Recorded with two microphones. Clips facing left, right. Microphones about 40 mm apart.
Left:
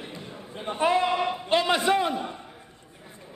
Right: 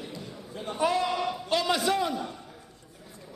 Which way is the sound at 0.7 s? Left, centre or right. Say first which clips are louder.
Left 3 dB; left.